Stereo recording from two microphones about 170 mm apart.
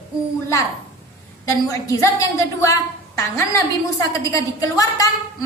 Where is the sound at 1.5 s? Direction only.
20° left (ahead or behind).